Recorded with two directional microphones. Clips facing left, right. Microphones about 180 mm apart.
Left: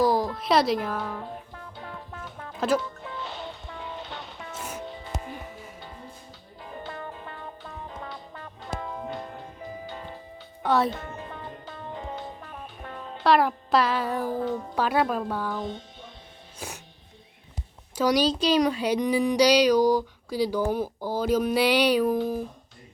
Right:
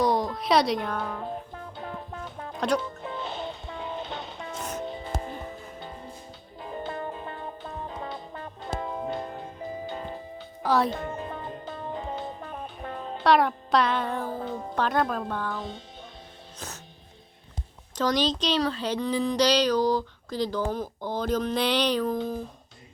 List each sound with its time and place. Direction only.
0.0 s a sound: centre (ahead or behind)
0.3 s music: centre (ahead or behind)
2.6 s speech: 5° left (ahead or behind)
3.1 s music: 25° right (ahead or behind)
4.5 s music: 10° left (ahead or behind)
4.9 s music: 25° right (ahead or behind)
6.8 s music: 30° right (ahead or behind)
9.8 s music: 50° right (ahead or behind)
10.6 s speech: centre (ahead or behind)
10.9 s music: 35° right (ahead or behind)
13.2 s music: centre (ahead or behind)
14.8 s speech: 5° left (ahead or behind)
16.6 s music: 10° left (ahead or behind)
17.9 s speech: 10° left (ahead or behind)